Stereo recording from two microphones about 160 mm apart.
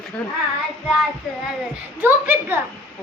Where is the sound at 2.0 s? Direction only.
15° right (ahead or behind).